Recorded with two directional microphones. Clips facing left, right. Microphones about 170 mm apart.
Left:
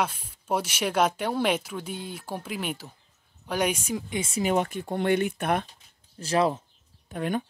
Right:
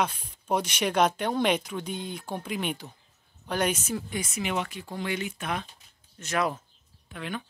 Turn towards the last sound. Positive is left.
turn(degrees=45)  # may be behind; listen again after turning